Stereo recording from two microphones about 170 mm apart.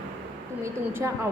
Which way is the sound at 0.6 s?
15° right (ahead or behind).